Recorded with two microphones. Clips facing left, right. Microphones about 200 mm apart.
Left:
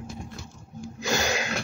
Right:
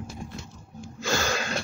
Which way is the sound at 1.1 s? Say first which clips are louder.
Left 1 dB; 20° left (ahead or behind).